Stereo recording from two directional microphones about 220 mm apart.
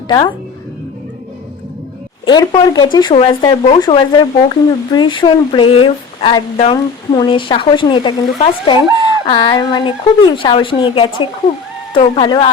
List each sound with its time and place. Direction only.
0.1 s speech: 20° left (ahead or behind)
2.2 s speech: 20° left (ahead or behind)